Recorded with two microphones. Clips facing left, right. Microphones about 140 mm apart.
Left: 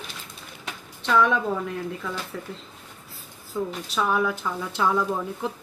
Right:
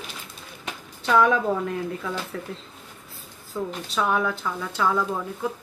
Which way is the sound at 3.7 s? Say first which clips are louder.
Right 2 dB; centre (ahead or behind).